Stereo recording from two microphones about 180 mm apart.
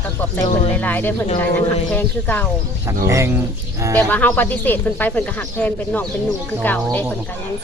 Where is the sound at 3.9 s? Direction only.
10° left (ahead or behind).